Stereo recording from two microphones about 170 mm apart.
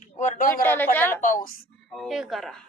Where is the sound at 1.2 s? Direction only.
55° left (ahead or behind).